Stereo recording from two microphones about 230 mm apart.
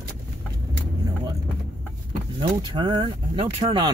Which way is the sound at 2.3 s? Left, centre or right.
Centre.